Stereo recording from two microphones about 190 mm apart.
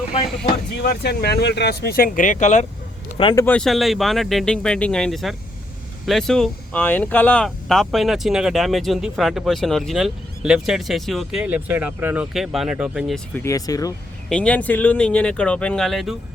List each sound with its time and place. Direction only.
0.8 s speech: 55° left (ahead or behind); by 2.6 s 40° left (ahead or behind)
3.2 s speech: 25° left (ahead or behind)
3.4 s speech: 5° left (ahead or behind)
14.3 s speech: 5° left (ahead or behind)